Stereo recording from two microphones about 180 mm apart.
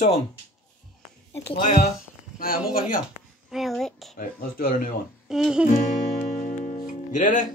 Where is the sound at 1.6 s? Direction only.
45° left (ahead or behind).